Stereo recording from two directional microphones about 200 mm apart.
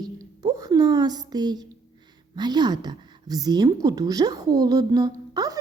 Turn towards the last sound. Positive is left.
turn(degrees=-20)  # may be behind; listen again after turning